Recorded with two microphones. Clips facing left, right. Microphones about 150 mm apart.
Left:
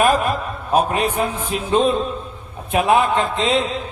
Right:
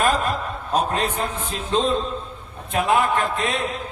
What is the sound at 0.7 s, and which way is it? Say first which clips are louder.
A man's voice: left 4 dB; 10° left (ahead or behind).